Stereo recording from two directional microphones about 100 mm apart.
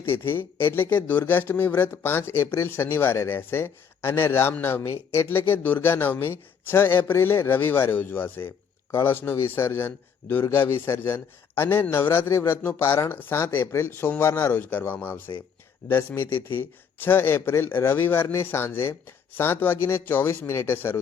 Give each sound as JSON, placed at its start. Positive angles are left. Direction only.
{"t": 0.0, "sound": "speech", "side_deg": 25}
{"t": 14.6, "sound": "speech", "side_deg": 15}